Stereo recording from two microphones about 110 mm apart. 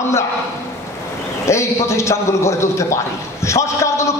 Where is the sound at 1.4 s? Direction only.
25° left (ahead or behind).